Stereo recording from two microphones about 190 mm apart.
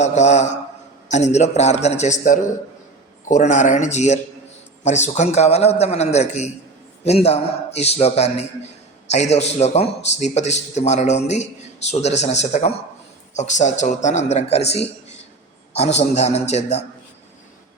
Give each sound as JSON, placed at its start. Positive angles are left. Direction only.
{"t": 0.0, "sound": "a man's voice", "side_deg": 35}